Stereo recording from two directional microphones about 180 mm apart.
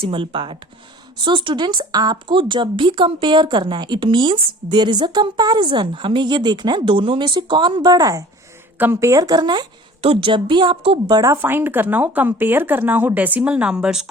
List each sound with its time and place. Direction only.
0.0 s speech: 30° right (ahead or behind)
11.1 s speech: 15° right (ahead or behind)